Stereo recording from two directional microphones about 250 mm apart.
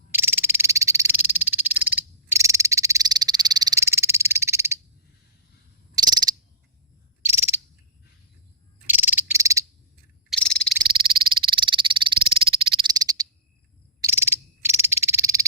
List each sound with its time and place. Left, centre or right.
0.1 s frog: centre
5.9 s frog: centre
7.3 s owl: centre
8.9 s cricket: centre
10.2 s frog: centre
10.8 s frog: right